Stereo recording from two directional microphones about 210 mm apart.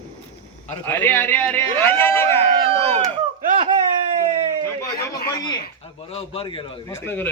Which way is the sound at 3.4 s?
30° right (ahead or behind).